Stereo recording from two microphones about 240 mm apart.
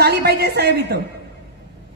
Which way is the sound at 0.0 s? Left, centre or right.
Right.